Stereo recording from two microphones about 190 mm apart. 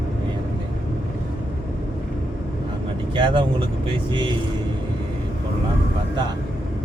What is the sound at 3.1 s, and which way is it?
Speech, 25° right (ahead or behind).